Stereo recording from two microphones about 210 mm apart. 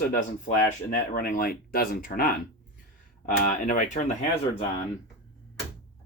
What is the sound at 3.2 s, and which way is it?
Speech, 35° left (ahead or behind).